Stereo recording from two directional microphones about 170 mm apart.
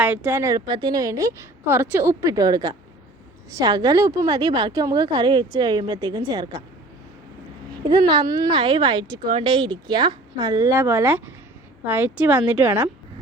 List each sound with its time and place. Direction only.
0.0 s speech: 10° right (ahead or behind)
7.9 s a woman's voice: 25° right (ahead or behind)